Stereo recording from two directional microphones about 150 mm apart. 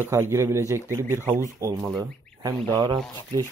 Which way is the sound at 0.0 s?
15° right (ahead or behind).